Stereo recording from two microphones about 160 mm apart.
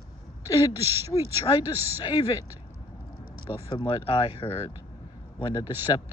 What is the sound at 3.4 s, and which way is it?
Speech, 30° left (ahead or behind).